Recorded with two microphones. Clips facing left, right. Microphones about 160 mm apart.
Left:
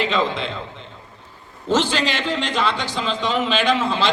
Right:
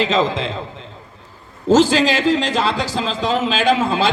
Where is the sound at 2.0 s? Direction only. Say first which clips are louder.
Right 7 dB; 90° right.